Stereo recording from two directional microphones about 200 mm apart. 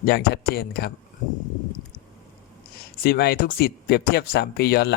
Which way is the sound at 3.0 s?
50° left (ahead or behind).